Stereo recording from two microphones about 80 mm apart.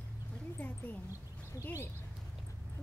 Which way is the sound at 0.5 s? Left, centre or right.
Left.